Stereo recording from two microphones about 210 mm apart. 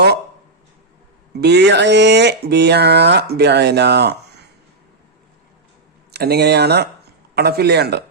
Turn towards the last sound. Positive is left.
turn(degrees=-50)  # may be behind; listen again after turning